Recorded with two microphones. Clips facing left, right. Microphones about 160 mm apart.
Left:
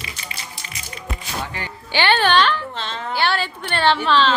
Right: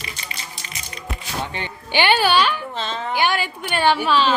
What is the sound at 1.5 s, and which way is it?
Speech, 20° right (ahead or behind).